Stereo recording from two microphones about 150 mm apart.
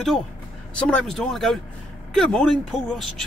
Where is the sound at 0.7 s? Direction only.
5° left (ahead or behind).